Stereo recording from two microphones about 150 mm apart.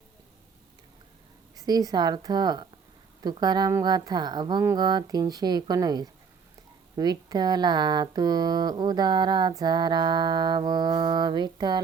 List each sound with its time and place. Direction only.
1.6 s speech: 25° right (ahead or behind)